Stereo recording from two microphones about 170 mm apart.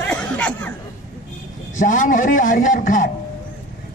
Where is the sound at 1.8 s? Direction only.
50° left (ahead or behind).